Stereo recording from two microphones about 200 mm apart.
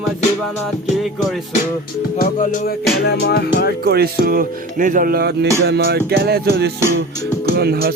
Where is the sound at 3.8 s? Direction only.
50° right (ahead or behind).